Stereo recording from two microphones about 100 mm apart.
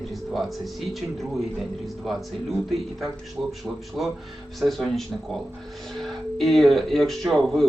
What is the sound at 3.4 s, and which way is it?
Speech, 15° right (ahead or behind).